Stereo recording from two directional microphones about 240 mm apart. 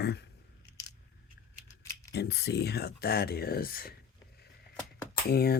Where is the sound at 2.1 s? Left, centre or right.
Left.